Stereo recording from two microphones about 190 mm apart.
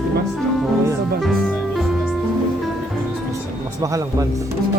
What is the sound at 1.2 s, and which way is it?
Music, centre (ahead or behind).